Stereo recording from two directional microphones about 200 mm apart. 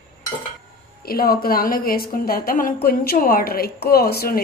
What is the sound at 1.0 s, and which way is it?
A woman's voice, 50° left (ahead or behind).